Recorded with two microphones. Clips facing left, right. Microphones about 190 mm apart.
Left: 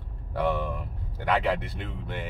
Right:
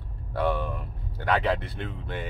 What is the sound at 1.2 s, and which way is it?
Speech, 15° left (ahead or behind).